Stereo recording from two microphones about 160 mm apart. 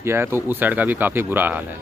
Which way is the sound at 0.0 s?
15° right (ahead or behind).